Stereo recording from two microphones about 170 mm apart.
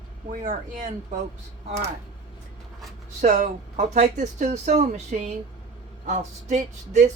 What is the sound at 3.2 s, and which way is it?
Speech, 45° right (ahead or behind).